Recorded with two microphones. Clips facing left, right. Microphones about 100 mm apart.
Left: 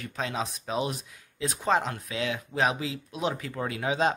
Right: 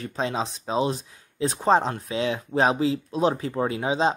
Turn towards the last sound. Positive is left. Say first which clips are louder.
# right 4 dB
turn(degrees=-25)  # may be behind; listen again after turning